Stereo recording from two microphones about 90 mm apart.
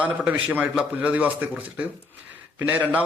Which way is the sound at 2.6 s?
20° right (ahead or behind).